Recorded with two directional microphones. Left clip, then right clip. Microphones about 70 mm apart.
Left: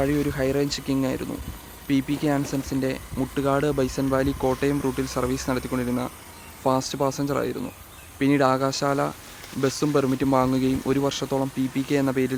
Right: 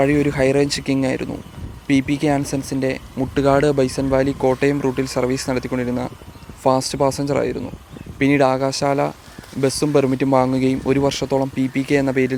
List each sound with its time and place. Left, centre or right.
0.0 s speech: right
2.6 s speech: right
3.3 s speech: right
3.8 s speech: right